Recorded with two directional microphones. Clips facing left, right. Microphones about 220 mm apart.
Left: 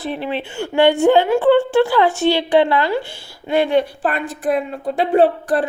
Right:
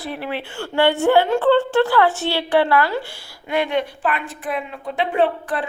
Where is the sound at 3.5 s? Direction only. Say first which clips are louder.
Left 5 dB; 30° left (ahead or behind).